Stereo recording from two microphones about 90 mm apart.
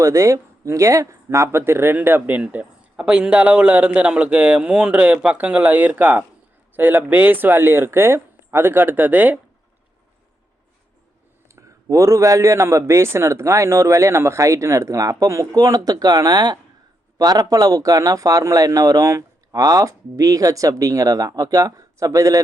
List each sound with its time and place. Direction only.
0.0 s speech: 35° right (ahead or behind); by 9.4 s 15° right (ahead or behind)
11.4 s a man's voice: 35° right (ahead or behind)